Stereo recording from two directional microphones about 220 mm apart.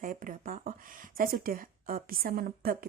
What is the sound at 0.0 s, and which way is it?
Speech, 40° right (ahead or behind).